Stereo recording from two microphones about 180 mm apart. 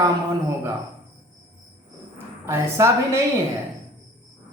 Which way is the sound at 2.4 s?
15° right (ahead or behind).